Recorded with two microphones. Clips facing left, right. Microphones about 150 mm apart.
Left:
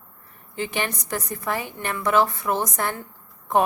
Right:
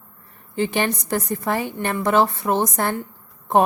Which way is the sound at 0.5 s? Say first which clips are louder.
Right 6 dB; 30° right (ahead or behind).